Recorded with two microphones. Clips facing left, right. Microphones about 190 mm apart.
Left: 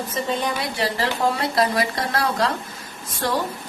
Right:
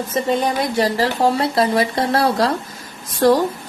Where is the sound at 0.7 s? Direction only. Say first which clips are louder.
Right 6 dB; 40° right (ahead or behind).